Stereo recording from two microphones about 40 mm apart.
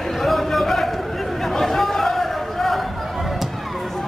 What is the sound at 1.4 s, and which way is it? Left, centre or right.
Chatter, centre.